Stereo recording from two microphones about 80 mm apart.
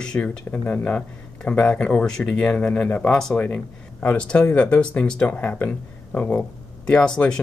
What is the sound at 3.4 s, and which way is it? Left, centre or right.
Speech, centre.